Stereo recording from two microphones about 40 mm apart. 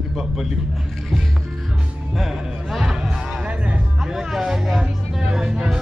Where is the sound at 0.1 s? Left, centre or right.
Centre.